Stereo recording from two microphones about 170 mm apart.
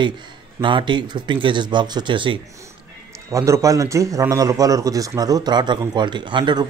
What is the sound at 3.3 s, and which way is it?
A man's voice, 20° right (ahead or behind).